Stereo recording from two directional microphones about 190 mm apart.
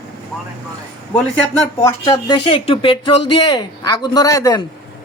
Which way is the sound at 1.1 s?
10° left (ahead or behind).